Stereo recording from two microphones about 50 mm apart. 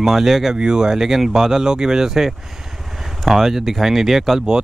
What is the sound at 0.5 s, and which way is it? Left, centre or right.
Speech, centre.